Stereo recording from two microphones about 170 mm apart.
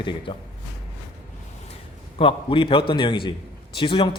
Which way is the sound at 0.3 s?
30° left (ahead or behind).